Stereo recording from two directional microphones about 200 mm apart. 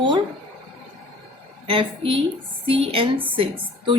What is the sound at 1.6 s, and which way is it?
A woman's voice, 25° right (ahead or behind).